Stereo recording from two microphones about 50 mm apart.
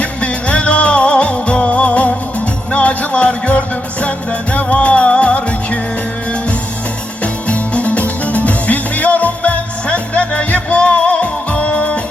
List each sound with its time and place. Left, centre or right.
0.0 s music: left
7.4 s music: left